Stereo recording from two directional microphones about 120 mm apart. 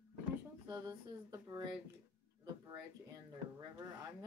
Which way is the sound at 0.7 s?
25° right (ahead or behind).